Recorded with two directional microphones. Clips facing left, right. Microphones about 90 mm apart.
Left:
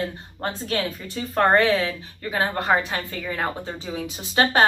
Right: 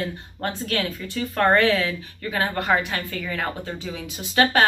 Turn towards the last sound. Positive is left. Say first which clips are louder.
# right 1 dB
turn(degrees=30)  # may be behind; listen again after turning